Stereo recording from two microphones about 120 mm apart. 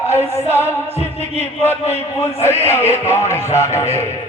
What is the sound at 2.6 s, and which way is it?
Music, 20° left (ahead or behind).